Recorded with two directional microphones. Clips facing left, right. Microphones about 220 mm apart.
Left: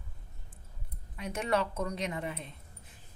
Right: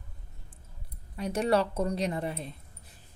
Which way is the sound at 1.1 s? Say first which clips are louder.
Right 5 dB; 35° right (ahead or behind).